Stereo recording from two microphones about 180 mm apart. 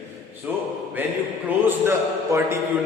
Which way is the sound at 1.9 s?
15° right (ahead or behind).